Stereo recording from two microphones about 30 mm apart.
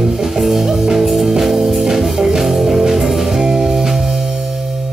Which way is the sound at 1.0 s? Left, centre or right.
Centre.